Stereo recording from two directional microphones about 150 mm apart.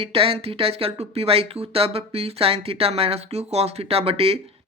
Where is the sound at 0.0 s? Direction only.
40° right (ahead or behind).